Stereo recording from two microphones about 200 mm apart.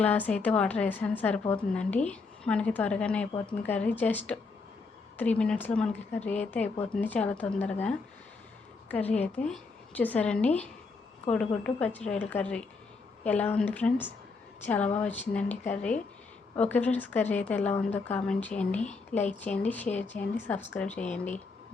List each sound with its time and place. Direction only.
0.0 s a woman's voice: 5° left (ahead or behind)
8.9 s a woman's voice: 10° left (ahead or behind)